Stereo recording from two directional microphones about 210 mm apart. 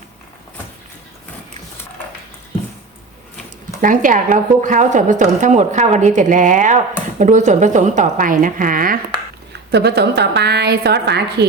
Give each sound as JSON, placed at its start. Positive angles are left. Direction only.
{"t": 3.8, "sound": "a woman's voice", "side_deg": -40}
{"t": 9.7, "sound": "a woman's voice", "side_deg": -50}